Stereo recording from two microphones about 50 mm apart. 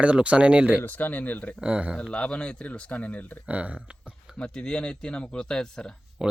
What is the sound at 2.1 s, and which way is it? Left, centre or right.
Speech, left.